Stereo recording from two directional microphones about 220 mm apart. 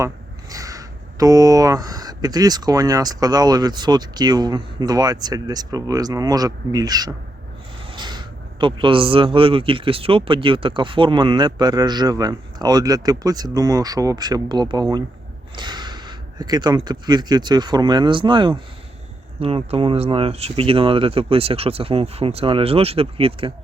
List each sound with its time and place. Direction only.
0.5 s a man's voice: 15° right (ahead or behind)